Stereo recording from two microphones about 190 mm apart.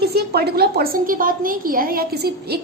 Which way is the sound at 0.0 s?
55° right (ahead or behind).